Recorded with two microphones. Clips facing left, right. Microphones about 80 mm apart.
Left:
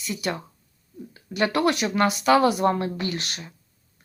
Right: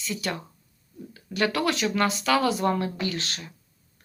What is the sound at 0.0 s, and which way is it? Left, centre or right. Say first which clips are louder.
A woman's voice: left 2 dB; left.